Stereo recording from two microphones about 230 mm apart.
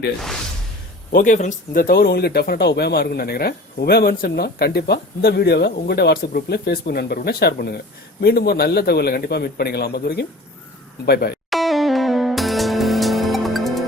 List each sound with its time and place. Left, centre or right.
1.1 s speech: left
11.5 s music: centre